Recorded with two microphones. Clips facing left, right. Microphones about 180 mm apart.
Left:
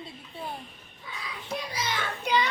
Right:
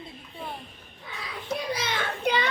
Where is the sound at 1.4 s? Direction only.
60° right (ahead or behind).